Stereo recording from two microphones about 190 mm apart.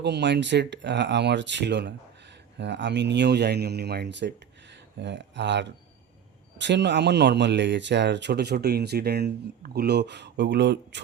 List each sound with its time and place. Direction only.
0.0 s speech: 65° right (ahead or behind)